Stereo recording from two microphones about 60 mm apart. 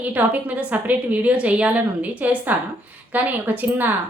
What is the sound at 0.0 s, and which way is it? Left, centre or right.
Speech, right.